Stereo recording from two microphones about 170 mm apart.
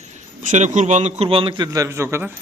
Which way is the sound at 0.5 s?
45° right (ahead or behind).